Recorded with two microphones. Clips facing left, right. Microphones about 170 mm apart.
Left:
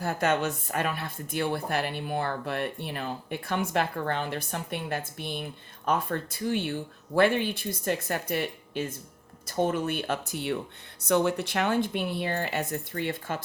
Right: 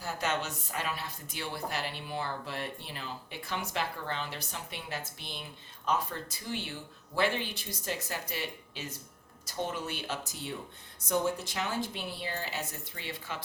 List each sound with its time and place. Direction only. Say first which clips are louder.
0.0 s speech: left 7 dB; 55° left (ahead or behind)